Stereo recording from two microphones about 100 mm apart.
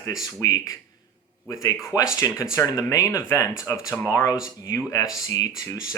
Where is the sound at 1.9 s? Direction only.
40° left (ahead or behind).